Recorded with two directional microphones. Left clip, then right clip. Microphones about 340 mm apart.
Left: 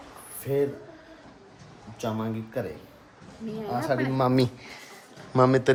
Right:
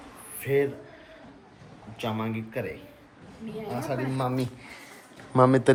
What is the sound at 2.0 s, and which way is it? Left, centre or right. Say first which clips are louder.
Speech: even; centre.